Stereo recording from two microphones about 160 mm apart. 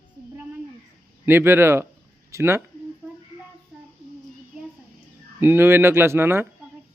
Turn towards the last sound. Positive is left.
turn(degrees=-15)  # may be behind; listen again after turning